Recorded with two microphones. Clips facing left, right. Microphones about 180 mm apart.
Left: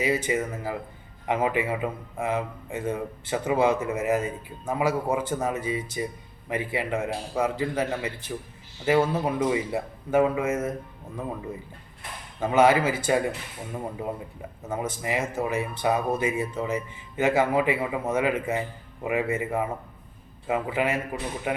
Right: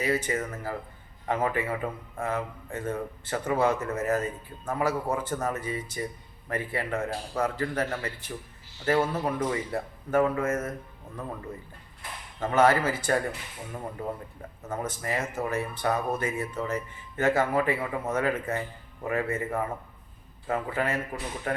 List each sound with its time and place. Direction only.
0.0 s a man's voice: 15° left (ahead or behind)
12.4 s a man's voice: 10° left (ahead or behind)
14.7 s a man's voice: 10° left (ahead or behind)